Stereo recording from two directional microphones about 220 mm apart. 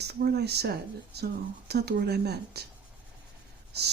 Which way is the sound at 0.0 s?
45° right (ahead or behind).